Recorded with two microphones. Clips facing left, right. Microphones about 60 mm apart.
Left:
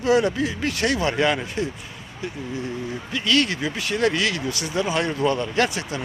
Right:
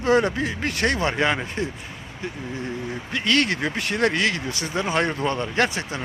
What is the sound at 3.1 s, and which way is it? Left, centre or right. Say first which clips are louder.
Speech: even; right.